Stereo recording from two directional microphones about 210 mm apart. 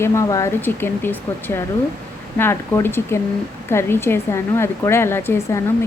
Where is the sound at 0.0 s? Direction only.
15° left (ahead or behind).